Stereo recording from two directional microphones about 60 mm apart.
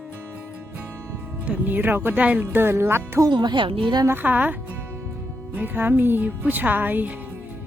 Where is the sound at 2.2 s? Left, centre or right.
Right.